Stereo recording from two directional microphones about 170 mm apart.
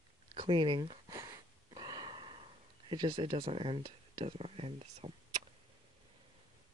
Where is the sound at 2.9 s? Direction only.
30° right (ahead or behind).